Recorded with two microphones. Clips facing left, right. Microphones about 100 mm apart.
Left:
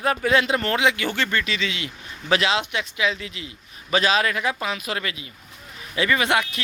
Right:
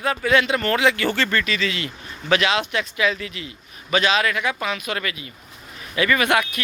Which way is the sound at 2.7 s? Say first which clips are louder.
Right 2 dB; 15° left (ahead or behind).